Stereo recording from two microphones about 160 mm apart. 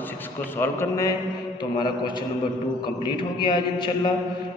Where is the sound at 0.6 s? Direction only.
20° left (ahead or behind).